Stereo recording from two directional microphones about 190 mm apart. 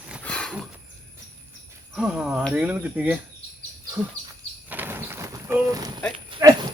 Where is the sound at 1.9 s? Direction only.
5° right (ahead or behind).